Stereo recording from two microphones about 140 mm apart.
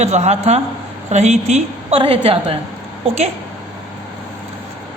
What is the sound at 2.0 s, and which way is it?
Speech, 45° right (ahead or behind).